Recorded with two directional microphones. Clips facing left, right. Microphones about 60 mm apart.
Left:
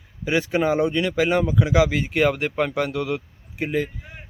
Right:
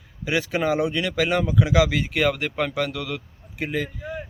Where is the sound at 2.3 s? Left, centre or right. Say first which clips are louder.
Left 2 dB; centre.